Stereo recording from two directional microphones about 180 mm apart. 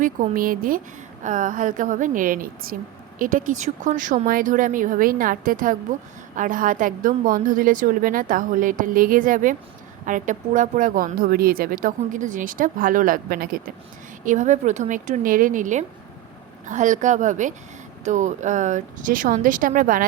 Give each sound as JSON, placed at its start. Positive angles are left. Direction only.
{"t": 0.0, "sound": "speech", "side_deg": -50}
{"t": 14.3, "sound": "speech", "side_deg": -45}